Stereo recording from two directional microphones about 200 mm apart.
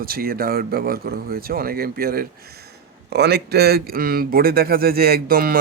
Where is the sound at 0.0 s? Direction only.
50° right (ahead or behind).